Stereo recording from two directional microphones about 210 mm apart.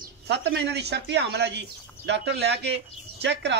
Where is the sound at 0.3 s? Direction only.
50° right (ahead or behind).